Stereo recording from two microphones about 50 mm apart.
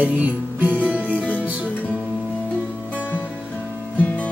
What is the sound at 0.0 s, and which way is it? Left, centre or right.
Music, right.